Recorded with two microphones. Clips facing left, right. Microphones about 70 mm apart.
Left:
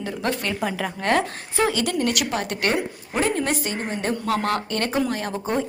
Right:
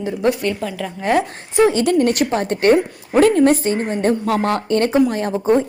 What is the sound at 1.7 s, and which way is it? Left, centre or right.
A woman's voice, right.